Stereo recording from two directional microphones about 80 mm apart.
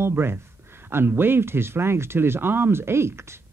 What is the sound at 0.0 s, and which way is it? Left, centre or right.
Speech, right.